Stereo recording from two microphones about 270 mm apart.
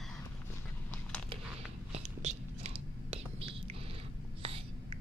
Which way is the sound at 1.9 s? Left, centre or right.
Right.